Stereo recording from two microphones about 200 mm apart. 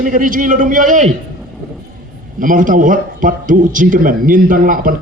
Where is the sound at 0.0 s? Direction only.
45° right (ahead or behind).